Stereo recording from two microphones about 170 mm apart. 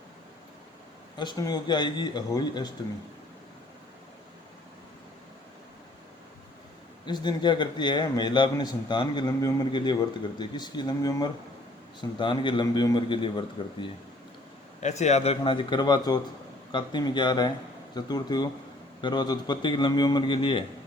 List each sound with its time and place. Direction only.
1.1 s a man's voice: 25° left (ahead or behind)
7.0 s a man's voice: 25° left (ahead or behind)
14.8 s a man's voice: 40° left (ahead or behind)